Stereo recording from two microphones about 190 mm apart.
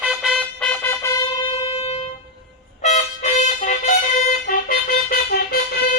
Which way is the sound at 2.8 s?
40° left (ahead or behind).